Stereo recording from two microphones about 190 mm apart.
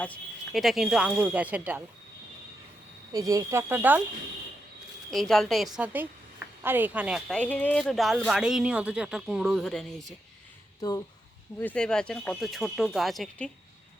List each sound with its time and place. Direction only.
0.0 s speech: 5° left (ahead or behind)
3.1 s speech: 20° right (ahead or behind)
5.1 s speech: centre (ahead or behind)
7.3 s speech: 5° left (ahead or behind)
10.8 s speech: 20° left (ahead or behind)
11.6 s speech: 5° left (ahead or behind)